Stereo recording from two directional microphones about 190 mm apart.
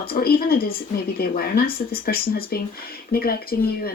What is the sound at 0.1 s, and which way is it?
Speech, 50° left (ahead or behind).